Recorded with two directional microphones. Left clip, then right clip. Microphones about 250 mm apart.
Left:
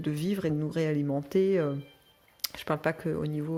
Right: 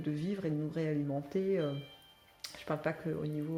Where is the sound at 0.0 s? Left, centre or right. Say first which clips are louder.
Left 6 dB; left.